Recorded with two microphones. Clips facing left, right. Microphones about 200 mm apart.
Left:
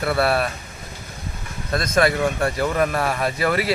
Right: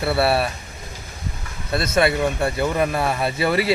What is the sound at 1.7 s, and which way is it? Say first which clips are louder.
Speech: even; 5° right (ahead or behind).